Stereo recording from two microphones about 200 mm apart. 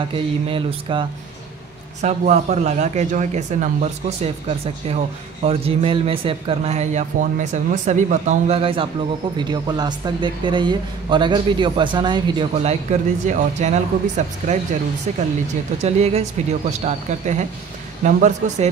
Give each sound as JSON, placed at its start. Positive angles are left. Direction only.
{"t": 0.1, "sound": "a man's voice", "side_deg": -25}
{"t": 12.9, "sound": "a man's voice", "side_deg": -35}